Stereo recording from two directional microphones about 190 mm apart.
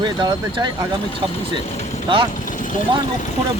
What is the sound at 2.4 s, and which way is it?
Vehicle, 45° left (ahead or behind).